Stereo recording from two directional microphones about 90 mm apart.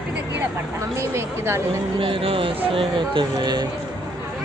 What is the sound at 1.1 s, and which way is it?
Speech, 30° right (ahead or behind).